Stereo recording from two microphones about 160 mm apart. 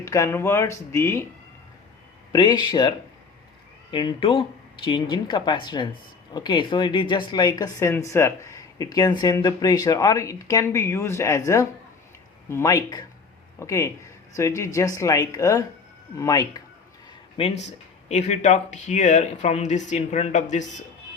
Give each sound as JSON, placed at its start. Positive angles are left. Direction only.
{"t": 0.0, "sound": "speech", "side_deg": 20}
{"t": 2.3, "sound": "speech", "side_deg": 25}
{"t": 3.9, "sound": "speech", "side_deg": 30}
{"t": 17.3, "sound": "speech", "side_deg": 40}